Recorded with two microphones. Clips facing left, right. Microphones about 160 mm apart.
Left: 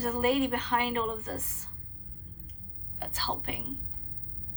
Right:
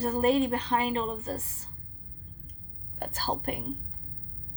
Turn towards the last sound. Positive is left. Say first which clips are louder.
# right 4 dB
turn(degrees=-45)  # may be behind; listen again after turning